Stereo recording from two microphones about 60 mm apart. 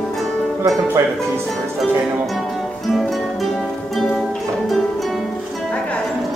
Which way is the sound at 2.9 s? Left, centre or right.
Centre.